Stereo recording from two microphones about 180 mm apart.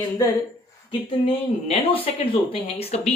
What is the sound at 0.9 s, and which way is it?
Speech, 30° left (ahead or behind).